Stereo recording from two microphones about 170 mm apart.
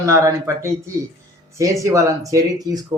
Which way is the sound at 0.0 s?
20° right (ahead or behind).